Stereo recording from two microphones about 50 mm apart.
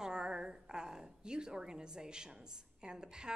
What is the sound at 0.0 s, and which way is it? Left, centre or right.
A woman's voice, centre.